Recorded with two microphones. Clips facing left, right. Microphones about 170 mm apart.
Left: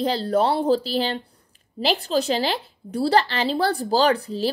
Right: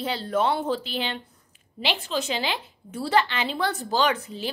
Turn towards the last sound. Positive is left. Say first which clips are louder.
# left 5 dB
turn(degrees=35)  # may be behind; listen again after turning